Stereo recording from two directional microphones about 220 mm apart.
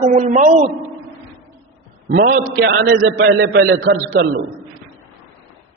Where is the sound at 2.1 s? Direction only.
45° right (ahead or behind).